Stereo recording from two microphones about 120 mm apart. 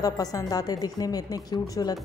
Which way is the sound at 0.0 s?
30° left (ahead or behind).